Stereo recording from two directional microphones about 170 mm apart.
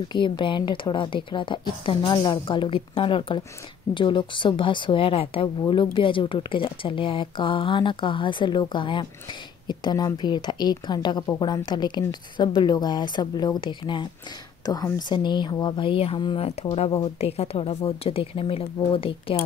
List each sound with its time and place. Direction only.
0.1 s a woman's voice: 30° left (ahead or behind)